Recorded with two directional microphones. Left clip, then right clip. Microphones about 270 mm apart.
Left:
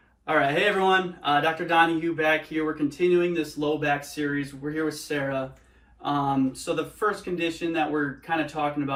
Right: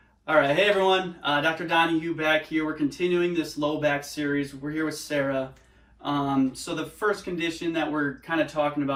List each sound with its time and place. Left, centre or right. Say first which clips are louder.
0.3 s speech: right 2 dB; centre